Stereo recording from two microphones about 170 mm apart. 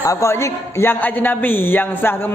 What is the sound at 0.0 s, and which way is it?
A man's voice, 20° left (ahead or behind).